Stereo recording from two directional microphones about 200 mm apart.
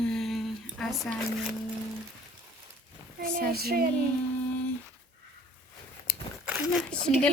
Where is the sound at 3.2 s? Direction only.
50° right (ahead or behind).